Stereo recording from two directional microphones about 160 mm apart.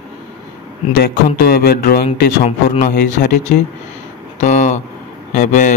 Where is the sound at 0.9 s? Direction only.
75° left (ahead or behind).